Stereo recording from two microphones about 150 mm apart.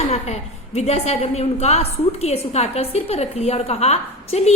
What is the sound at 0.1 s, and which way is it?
A woman's voice, 45° left (ahead or behind).